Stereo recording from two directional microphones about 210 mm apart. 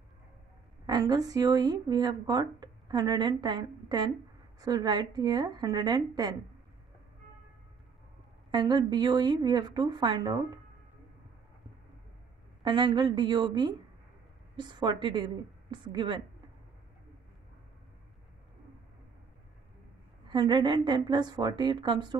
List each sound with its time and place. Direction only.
0.8 s speech: 20° right (ahead or behind)
8.5 s speech: 20° right (ahead or behind)
12.6 s speech: 20° right (ahead or behind)
20.2 s speech: 20° right (ahead or behind)